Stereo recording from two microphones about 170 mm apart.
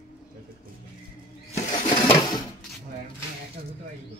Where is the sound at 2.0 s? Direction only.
20° left (ahead or behind).